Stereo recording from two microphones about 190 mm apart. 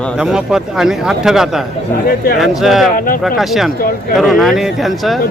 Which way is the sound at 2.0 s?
50° left (ahead or behind).